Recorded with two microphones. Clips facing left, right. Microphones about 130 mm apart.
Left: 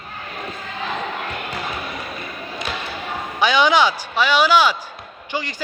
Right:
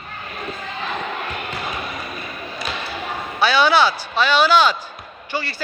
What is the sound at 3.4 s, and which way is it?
A man's voice, 15° left (ahead or behind).